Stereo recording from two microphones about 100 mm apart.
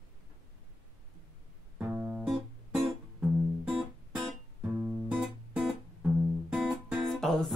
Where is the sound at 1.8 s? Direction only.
20° right (ahead or behind).